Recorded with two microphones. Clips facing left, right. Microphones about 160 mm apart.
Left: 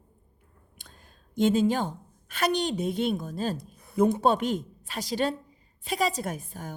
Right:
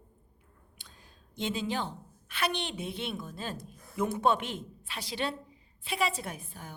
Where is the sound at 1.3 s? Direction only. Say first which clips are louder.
Left 10 dB; 45° left (ahead or behind).